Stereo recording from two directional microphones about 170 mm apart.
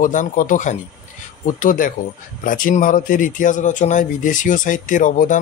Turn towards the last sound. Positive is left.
turn(degrees=50)  # may be behind; listen again after turning